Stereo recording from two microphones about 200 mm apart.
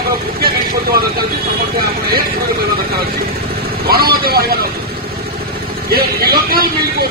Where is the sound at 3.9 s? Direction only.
50° right (ahead or behind).